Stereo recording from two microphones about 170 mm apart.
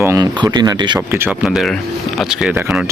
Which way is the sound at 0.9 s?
10° right (ahead or behind).